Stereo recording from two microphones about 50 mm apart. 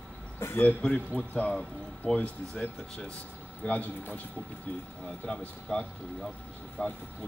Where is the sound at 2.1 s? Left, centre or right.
Left.